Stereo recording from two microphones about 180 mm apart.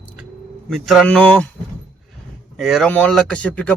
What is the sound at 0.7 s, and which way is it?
Speech, centre (ahead or behind).